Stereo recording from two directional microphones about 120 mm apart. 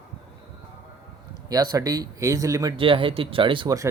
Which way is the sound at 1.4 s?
35° right (ahead or behind).